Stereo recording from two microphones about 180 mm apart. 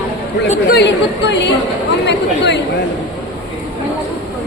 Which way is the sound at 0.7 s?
75° left (ahead or behind).